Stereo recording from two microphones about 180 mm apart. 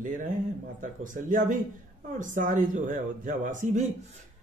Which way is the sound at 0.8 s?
45° right (ahead or behind).